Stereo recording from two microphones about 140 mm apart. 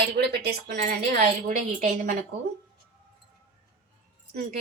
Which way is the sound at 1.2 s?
65° right (ahead or behind).